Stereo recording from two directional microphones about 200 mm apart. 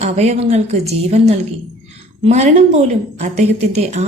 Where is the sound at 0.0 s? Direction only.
30° right (ahead or behind).